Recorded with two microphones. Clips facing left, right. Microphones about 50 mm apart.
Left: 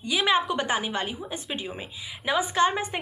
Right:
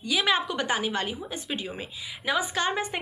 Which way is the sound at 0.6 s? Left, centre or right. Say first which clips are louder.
Even; centre.